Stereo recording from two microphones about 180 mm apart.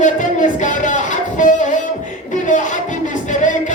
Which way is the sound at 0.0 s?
45° left (ahead or behind).